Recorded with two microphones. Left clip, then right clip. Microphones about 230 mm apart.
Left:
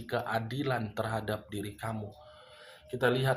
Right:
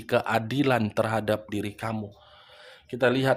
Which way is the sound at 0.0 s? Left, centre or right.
Right.